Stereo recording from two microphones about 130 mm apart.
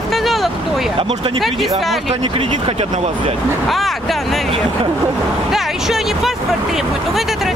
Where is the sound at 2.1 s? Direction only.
50° right (ahead or behind).